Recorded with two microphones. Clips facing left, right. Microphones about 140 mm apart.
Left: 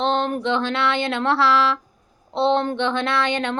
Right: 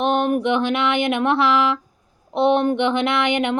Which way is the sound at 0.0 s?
15° right (ahead or behind).